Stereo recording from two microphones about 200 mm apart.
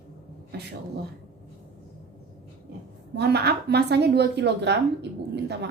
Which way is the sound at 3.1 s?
55° right (ahead or behind).